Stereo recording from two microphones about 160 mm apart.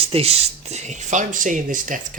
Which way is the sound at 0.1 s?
40° right (ahead or behind).